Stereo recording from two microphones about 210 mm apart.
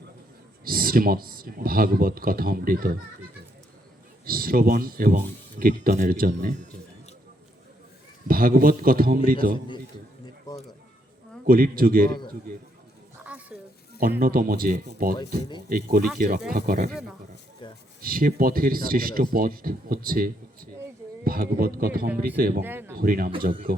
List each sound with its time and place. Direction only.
0.6 s speech: 45° right (ahead or behind)
4.3 s speech: 45° right (ahead or behind)
8.3 s speech: 45° right (ahead or behind)
11.4 s speech: 45° right (ahead or behind)
13.5 s a sound: 5° right (ahead or behind)
14.2 s speech: 45° right (ahead or behind)
16.9 s speech: centre (ahead or behind)
17.6 s a sound: 25° left (ahead or behind)
18.0 s speech: 45° right (ahead or behind)
22.6 s speech: 10° right (ahead or behind)
23.0 s speech: 45° right (ahead or behind)